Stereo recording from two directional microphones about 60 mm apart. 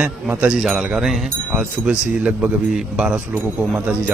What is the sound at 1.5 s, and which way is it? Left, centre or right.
Speech, right.